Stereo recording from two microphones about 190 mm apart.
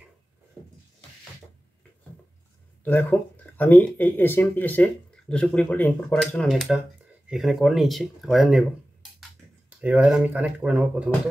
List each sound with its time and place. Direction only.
2.8 s speech: 10° left (ahead or behind); by 11.1 s 5° right (ahead or behind)